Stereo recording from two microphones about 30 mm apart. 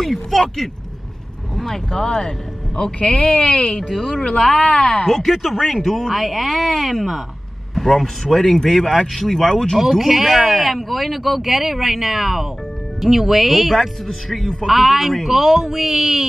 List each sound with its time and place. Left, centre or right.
0.0 s speech: centre
1.7 s speech: left
3.2 s speech: left
4.6 s speech: centre
5.1 s speech: centre
9.8 s speech: centre